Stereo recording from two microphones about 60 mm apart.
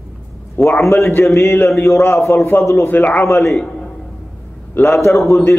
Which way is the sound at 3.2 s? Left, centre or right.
Left.